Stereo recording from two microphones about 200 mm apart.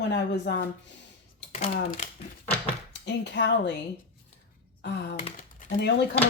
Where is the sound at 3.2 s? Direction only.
60° left (ahead or behind).